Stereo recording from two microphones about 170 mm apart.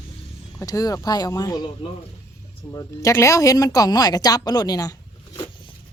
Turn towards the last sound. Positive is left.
turn(degrees=20)  # may be behind; listen again after turning